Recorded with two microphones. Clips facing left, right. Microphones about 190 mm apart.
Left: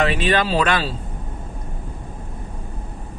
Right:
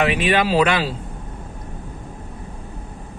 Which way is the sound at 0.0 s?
10° right (ahead or behind).